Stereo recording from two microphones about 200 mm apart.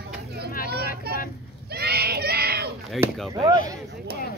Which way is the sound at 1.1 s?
50° right (ahead or behind).